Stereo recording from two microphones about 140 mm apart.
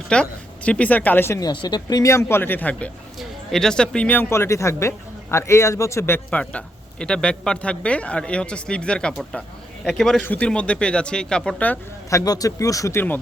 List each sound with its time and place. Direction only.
0.1 s speech: 10° left (ahead or behind)
12.1 s speech: 25° left (ahead or behind)